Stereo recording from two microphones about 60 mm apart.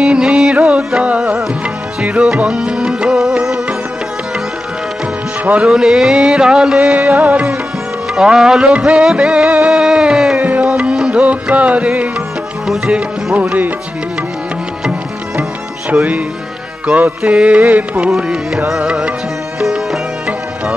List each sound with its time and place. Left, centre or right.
0.0 s music: centre
2.4 s music: centre
5.6 s a sound: centre
7.0 s music: right
8.1 s a sound: centre
9.7 s music: centre
10.4 s music: right
12.9 s music: right
15.9 s music: right
17.3 s music: right
18.1 s a sound: centre
19.6 s sitar: centre